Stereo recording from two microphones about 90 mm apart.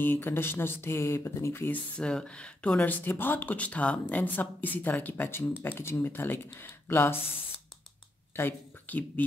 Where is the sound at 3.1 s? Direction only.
25° left (ahead or behind).